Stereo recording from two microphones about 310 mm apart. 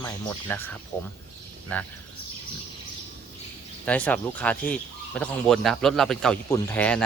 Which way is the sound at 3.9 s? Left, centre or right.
Centre.